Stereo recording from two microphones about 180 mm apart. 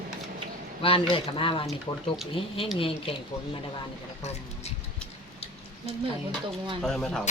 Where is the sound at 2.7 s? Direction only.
30° left (ahead or behind).